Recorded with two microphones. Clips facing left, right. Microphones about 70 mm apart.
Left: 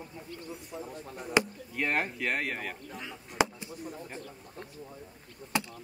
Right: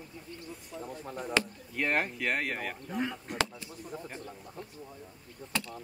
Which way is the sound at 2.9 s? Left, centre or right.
Right.